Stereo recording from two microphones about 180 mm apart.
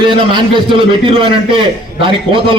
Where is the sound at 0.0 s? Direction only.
25° right (ahead or behind).